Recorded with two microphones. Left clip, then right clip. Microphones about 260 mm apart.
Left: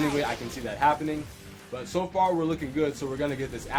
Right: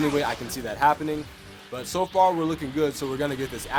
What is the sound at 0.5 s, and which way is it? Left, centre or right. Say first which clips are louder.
Speech: right 3 dB; right.